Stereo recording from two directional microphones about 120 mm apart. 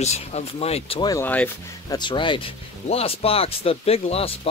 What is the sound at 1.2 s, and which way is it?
Speech, 15° left (ahead or behind).